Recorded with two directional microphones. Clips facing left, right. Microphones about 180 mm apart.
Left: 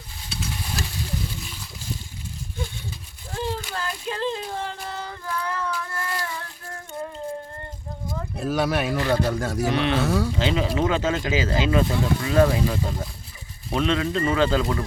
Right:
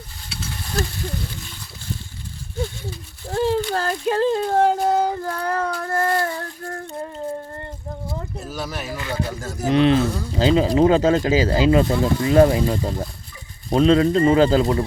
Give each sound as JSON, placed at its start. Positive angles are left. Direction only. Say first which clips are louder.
{"t": 3.3, "sound": "a sound", "louder": "right 9 dB", "side_deg": -40}
{"t": 8.4, "sound": "speech", "louder": "left 9 dB", "side_deg": 65}
{"t": 9.7, "sound": "speech", "louder": "right 7 dB", "side_deg": -30}